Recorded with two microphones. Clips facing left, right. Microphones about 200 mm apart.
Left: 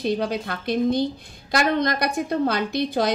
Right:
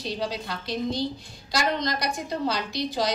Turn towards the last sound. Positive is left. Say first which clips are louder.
# left 5 dB
turn(degrees=55)  # may be behind; listen again after turning